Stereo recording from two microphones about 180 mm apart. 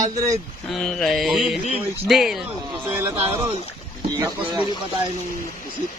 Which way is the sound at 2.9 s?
10° right (ahead or behind).